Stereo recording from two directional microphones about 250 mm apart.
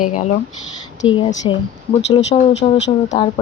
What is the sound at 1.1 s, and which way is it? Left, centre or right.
Speech, centre.